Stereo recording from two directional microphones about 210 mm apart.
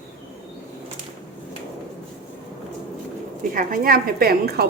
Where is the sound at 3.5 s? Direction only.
45° right (ahead or behind).